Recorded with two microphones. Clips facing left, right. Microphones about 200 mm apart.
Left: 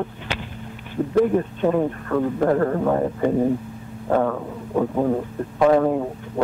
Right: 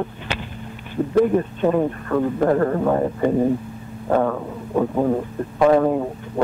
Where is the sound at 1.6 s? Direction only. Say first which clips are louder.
Right 1 dB; 25° right (ahead or behind).